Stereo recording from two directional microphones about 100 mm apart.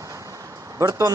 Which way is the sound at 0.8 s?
35° right (ahead or behind).